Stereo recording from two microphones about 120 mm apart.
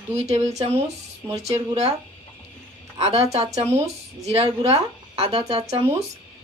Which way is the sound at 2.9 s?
55° right (ahead or behind).